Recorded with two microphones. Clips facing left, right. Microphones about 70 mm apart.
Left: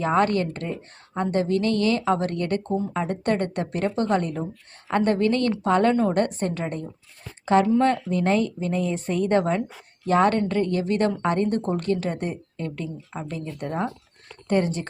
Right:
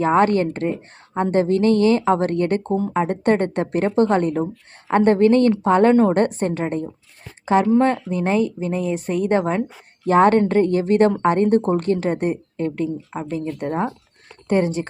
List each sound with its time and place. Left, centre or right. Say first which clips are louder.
0.0 s a woman's voice: right 5 dB; right
10.1 s a woman's voice: right 6 dB; right